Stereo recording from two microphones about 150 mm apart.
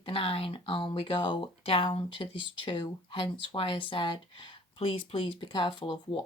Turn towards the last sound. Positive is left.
turn(degrees=30)  # may be behind; listen again after turning